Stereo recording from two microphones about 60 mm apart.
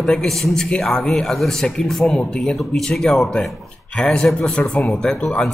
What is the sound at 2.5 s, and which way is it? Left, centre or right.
A man's voice, centre.